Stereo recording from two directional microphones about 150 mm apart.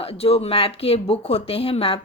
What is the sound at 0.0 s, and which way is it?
Speech, 40° left (ahead or behind).